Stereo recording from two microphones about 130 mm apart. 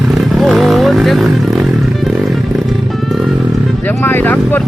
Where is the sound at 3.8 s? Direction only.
15° left (ahead or behind).